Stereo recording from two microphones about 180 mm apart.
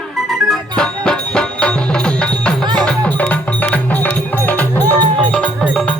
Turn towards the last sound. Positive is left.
turn(degrees=5)  # may be behind; listen again after turning